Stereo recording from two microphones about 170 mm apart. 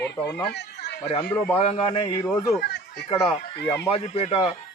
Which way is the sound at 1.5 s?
35° left (ahead or behind).